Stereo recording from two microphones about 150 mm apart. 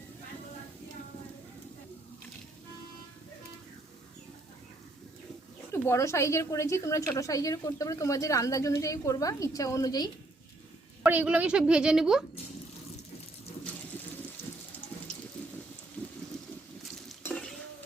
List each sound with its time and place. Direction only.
5.7 s a woman's voice: 20° left (ahead or behind)
11.0 s a woman's voice: 10° right (ahead or behind)
17.2 s stir: 10° left (ahead or behind)